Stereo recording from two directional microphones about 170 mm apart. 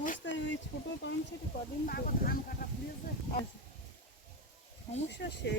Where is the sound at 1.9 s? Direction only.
60° left (ahead or behind).